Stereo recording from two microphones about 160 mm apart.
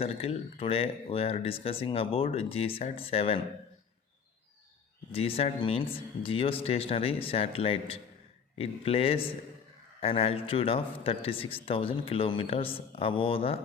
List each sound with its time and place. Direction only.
0.0 s a man's voice: 40° left (ahead or behind)
5.1 s a man's voice: 35° left (ahead or behind)